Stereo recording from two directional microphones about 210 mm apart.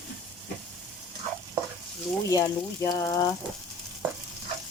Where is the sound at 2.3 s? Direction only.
15° left (ahead or behind).